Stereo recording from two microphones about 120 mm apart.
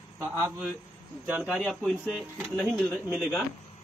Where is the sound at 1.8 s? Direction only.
5° left (ahead or behind).